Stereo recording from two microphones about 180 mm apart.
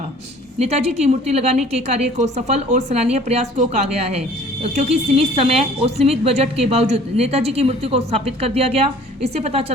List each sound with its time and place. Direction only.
0.6 s a woman's voice: 35° right (ahead or behind)